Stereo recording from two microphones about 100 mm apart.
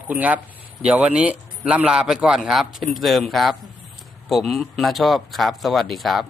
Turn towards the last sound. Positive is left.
turn(degrees=0)  # may be behind; listen again after turning